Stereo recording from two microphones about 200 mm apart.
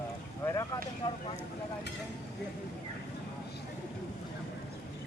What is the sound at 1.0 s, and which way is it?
Speech, 20° left (ahead or behind).